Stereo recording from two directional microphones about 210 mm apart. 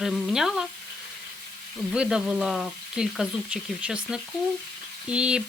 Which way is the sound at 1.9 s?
5° right (ahead or behind).